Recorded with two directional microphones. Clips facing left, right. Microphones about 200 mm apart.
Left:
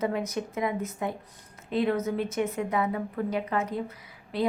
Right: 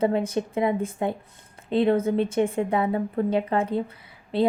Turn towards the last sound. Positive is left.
turn(degrees=-30)  # may be behind; listen again after turning